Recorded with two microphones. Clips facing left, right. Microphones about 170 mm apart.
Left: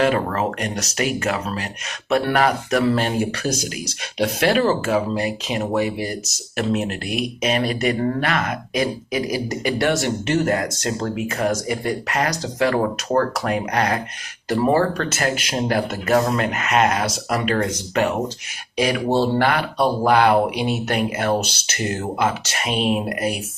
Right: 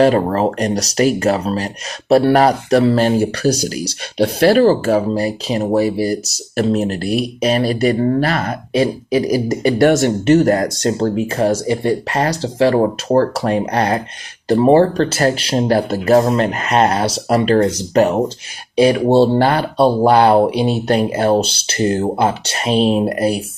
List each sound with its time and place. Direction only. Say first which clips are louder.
0.0 s speech: right 6 dB; 35° right (ahead or behind)